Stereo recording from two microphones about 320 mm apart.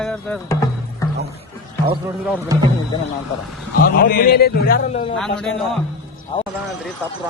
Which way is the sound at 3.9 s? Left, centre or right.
Left.